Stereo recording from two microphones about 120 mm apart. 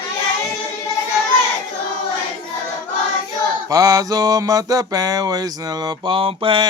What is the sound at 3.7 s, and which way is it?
Mantra, 30° right (ahead or behind).